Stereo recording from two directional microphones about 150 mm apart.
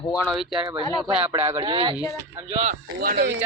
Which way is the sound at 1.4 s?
15° right (ahead or behind).